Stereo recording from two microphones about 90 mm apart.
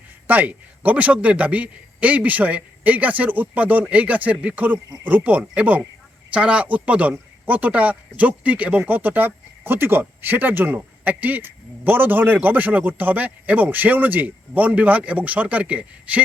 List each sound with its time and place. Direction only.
0.3 s speech: 15° right (ahead or behind)